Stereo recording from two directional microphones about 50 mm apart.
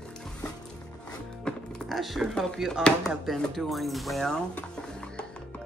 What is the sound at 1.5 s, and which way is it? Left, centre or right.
Music, centre.